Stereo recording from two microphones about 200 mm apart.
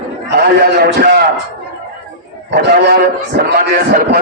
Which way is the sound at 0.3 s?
50° right (ahead or behind).